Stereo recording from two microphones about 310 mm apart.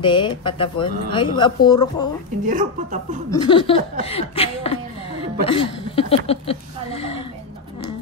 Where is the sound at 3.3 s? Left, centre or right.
Centre.